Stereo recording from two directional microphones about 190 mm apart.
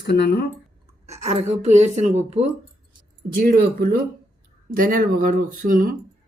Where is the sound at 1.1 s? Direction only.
35° right (ahead or behind).